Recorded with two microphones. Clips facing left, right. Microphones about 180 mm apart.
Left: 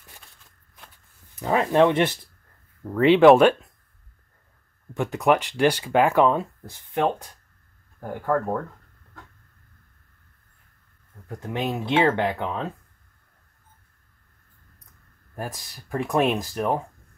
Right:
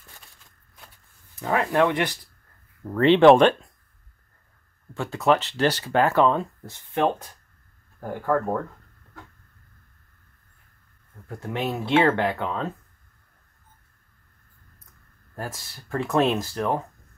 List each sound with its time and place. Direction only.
1.3 s speech: 20° left (ahead or behind)
2.8 s speech: 5° left (ahead or behind)
4.9 s speech: 15° left (ahead or behind)
8.1 s speech: centre (ahead or behind)
11.2 s speech: 15° left (ahead or behind)
15.3 s speech: 15° left (ahead or behind)